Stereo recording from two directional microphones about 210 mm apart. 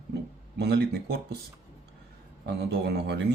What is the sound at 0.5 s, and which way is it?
Speech, 50° right (ahead or behind).